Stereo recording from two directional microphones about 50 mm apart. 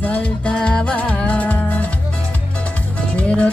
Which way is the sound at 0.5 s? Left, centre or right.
Centre.